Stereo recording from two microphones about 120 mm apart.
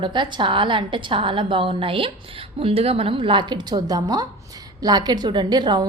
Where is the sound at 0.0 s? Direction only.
40° right (ahead or behind).